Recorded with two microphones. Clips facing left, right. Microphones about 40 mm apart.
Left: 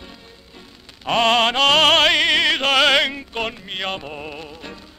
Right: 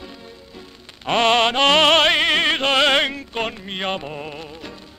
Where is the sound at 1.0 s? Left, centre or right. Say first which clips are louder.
Even; right.